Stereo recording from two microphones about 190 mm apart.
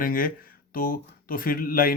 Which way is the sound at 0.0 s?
45° left (ahead or behind).